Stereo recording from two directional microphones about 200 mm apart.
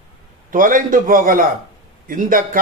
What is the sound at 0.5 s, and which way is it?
Speech, 45° right (ahead or behind).